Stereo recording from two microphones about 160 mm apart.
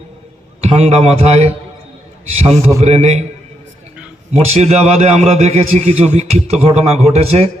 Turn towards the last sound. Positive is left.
turn(degrees=-40)  # may be behind; listen again after turning